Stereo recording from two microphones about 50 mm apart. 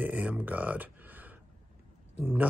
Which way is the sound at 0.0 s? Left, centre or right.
Right.